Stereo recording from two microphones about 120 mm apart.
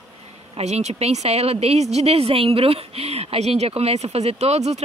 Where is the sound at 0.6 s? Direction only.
65° right (ahead or behind).